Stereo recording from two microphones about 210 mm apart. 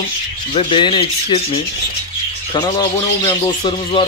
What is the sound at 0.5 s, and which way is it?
Speech, 25° left (ahead or behind).